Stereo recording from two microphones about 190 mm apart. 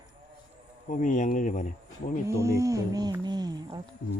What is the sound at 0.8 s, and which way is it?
Speech, 45° left (ahead or behind).